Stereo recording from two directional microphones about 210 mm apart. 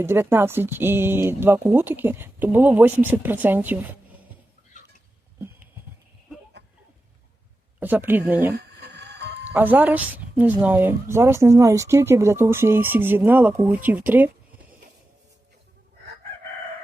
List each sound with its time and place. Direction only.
0.0 s speech: 10° right (ahead or behind)
7.8 s speech: 10° right (ahead or behind)
8.5 s a sound: 50° right (ahead or behind)
9.5 s speech: 10° right (ahead or behind)